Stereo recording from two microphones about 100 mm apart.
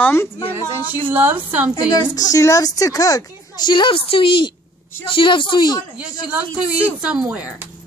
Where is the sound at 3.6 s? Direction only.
55° left (ahead or behind).